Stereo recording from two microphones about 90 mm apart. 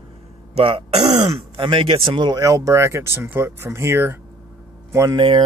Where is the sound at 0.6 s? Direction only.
85° right.